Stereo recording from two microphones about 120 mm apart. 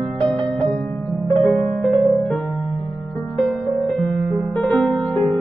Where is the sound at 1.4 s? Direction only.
5° left (ahead or behind).